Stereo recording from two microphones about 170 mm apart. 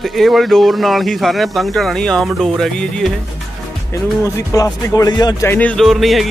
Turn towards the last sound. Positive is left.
turn(degrees=0)  # may be behind; listen again after turning